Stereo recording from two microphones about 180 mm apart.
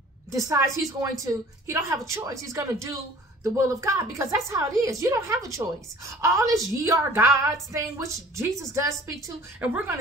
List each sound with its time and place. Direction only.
0.3 s a woman's voice: 15° right (ahead or behind)